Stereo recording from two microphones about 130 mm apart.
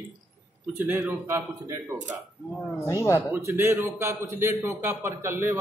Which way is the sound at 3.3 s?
20° right (ahead or behind).